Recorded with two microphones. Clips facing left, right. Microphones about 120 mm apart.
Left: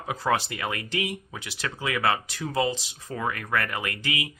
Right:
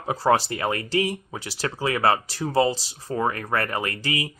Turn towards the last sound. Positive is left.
turn(degrees=-35)  # may be behind; listen again after turning